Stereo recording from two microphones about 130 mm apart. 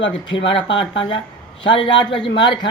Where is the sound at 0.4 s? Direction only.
40° left (ahead or behind).